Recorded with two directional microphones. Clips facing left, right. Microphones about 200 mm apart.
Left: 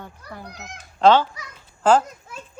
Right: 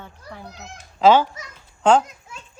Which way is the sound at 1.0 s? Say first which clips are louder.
Right 1 dB; 5° right (ahead or behind).